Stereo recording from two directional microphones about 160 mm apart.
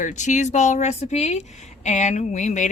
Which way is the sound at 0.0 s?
50° left (ahead or behind).